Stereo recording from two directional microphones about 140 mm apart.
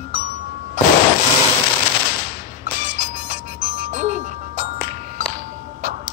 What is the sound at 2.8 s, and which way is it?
Music, 55° right (ahead or behind).